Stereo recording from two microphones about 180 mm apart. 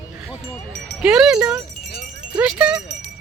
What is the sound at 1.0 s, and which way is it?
Speech, 5° right (ahead or behind).